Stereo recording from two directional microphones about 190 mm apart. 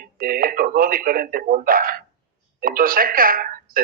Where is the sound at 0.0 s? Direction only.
50° right (ahead or behind).